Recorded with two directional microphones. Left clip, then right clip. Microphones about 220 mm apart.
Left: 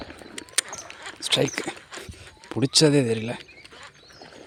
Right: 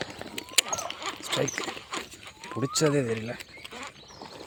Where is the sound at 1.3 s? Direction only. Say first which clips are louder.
Left 7 dB; 45° left (ahead or behind).